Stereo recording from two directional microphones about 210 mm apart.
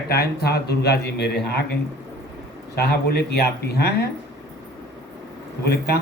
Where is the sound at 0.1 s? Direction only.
50° left (ahead or behind).